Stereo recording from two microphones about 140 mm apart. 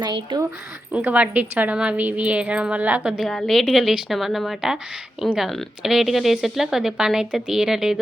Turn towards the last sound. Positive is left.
turn(degrees=-5)  # may be behind; listen again after turning